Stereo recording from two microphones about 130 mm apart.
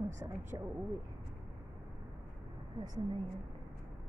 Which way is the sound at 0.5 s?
30° right (ahead or behind).